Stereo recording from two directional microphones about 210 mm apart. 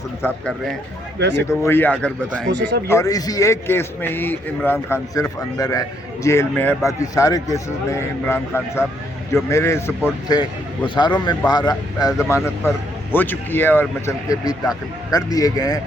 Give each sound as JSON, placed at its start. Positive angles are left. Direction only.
{"t": 0.2, "sound": "speech", "side_deg": 5}
{"t": 2.5, "sound": "speech", "side_deg": -55}
{"t": 2.8, "sound": "a man's voice", "side_deg": 15}